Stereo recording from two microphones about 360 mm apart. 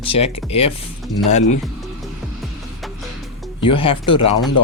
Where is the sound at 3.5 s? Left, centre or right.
Centre.